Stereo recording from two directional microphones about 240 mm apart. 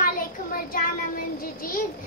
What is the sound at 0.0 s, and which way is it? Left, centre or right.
Child singing, left.